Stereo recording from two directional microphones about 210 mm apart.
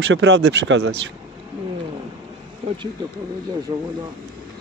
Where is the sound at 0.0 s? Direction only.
60° right (ahead or behind).